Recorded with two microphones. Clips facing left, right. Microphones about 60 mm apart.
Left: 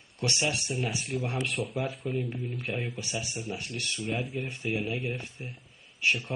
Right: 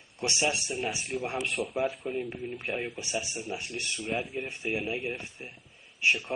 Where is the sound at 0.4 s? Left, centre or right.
Centre; by 4.1 s right.